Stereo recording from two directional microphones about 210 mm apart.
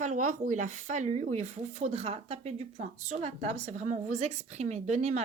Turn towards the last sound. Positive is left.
turn(degrees=-35)  # may be behind; listen again after turning